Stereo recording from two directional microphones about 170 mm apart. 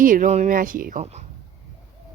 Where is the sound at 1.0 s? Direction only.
40° right (ahead or behind).